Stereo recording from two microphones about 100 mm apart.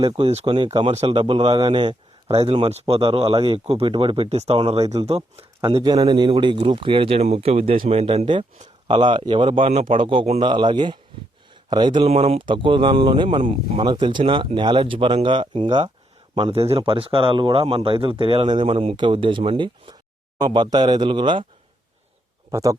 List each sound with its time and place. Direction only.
0.3 s speech: 90° right
0.5 s speech: 55° right (ahead or behind)
0.9 s speech: 75° right (ahead or behind); by 2.4 s 50° right (ahead or behind)
2.4 s speech: 80° right
3.3 s speech: 55° right (ahead or behind); by 5.5 s 70° right (ahead or behind)
5.6 s speech: 45° right (ahead or behind)
6.3 s speech: 60° right (ahead or behind)
8.9 s speech: 55° right (ahead or behind); by 10.4 s 75° right (ahead or behind)
10.4 s speech: 50° right (ahead or behind)
12.0 s speech: 90° right
12.4 s speech: 55° right (ahead or behind)
13.9 s speech: 50° right (ahead or behind); by 18.9 s 70° right (ahead or behind)
18.9 s speech: 55° right (ahead or behind)
22.5 s speech: 30° right (ahead or behind)